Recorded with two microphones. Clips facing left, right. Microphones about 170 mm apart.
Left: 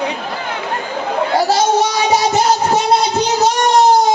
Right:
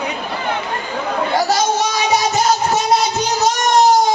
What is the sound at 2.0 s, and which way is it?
Music, 30° left (ahead or behind).